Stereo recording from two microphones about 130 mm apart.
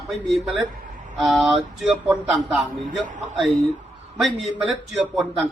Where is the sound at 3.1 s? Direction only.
75° right (ahead or behind).